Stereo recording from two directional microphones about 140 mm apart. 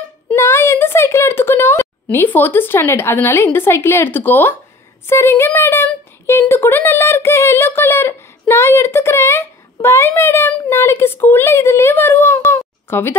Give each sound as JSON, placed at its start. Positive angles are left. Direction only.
{"t": 0.3, "sound": "speech", "side_deg": 20}